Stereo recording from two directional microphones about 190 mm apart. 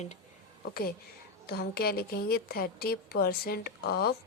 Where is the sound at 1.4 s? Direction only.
55° left (ahead or behind).